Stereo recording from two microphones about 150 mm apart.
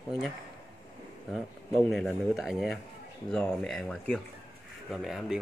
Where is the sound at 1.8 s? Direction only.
Centre (ahead or behind).